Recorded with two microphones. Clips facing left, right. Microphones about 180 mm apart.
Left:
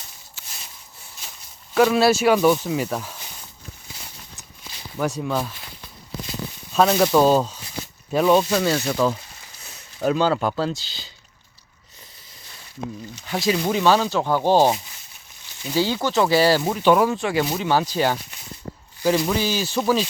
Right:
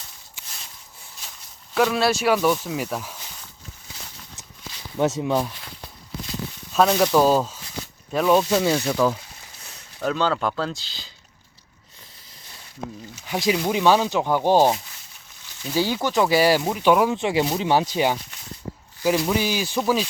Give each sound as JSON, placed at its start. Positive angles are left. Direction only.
{"t": 0.4, "sound": "a sound", "side_deg": -15}
{"t": 1.7, "sound": "speech", "side_deg": 5}
{"t": 4.9, "sound": "speech", "side_deg": -20}
{"t": 6.7, "sound": "speech", "side_deg": 5}
{"t": 8.8, "sound": "speech", "side_deg": 5}
{"t": 13.1, "sound": "speech", "side_deg": -10}
{"t": 15.8, "sound": "speech", "side_deg": -15}
{"t": 17.2, "sound": "speech", "side_deg": -25}
{"t": 19.0, "sound": "speech", "side_deg": 0}
{"t": 19.3, "sound": "speech", "side_deg": -15}